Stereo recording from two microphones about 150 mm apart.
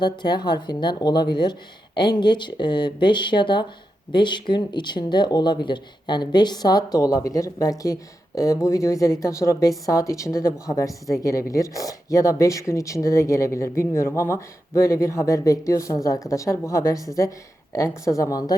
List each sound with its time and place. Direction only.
0.0 s speech: 30° left (ahead or behind)